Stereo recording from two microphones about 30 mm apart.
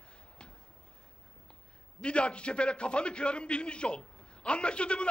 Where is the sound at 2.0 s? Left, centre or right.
Left.